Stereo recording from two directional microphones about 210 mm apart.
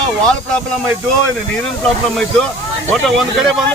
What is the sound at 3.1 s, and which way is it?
Speech, centre (ahead or behind).